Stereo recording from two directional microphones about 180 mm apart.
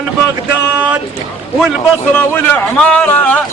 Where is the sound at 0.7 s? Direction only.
10° right (ahead or behind).